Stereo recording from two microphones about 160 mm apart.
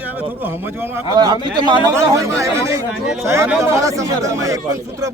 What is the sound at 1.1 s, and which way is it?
Speech, 25° right (ahead or behind).